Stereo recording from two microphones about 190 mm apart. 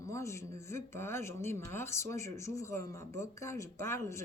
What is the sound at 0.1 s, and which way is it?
Speech, 15° left (ahead or behind).